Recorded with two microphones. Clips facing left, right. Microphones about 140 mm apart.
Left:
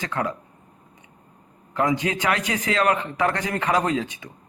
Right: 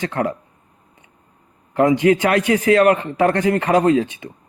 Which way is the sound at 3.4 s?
30° right (ahead or behind).